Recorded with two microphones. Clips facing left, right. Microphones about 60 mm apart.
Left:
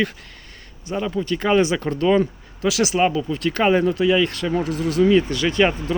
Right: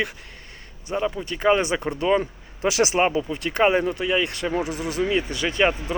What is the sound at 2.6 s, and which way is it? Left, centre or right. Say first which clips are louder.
Speech: left 1 dB; right.